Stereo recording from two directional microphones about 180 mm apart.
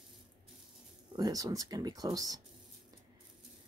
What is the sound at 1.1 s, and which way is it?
Speech, 20° right (ahead or behind).